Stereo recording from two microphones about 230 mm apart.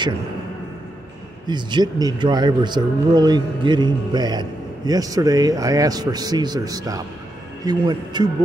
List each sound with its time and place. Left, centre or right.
1.5 s speech: centre